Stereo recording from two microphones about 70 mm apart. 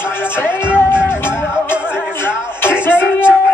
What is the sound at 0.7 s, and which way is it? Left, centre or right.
Music, left.